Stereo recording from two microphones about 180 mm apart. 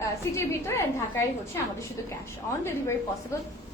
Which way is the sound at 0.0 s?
15° left (ahead or behind).